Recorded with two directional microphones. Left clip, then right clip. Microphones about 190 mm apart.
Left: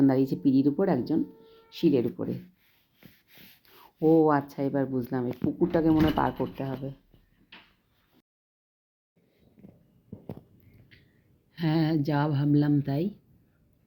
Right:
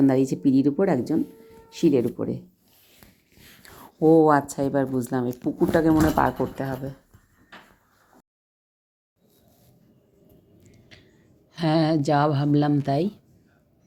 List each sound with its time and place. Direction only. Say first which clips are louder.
0.0 s a woman's voice: right 3 dB; 15° right (ahead or behind)
4.0 s a woman's voice: right 5 dB; 15° right (ahead or behind)
10.9 s a sound: right 7 dB; 10° right (ahead or behind)
11.5 s a woman's voice: right 6 dB; 15° right (ahead or behind)